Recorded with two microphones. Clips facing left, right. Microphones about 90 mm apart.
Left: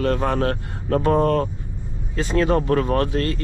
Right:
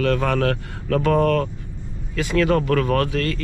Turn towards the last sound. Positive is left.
turn(degrees=25)  # may be behind; listen again after turning